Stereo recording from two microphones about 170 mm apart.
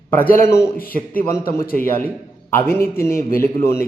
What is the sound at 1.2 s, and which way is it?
A man's voice, 15° left (ahead or behind).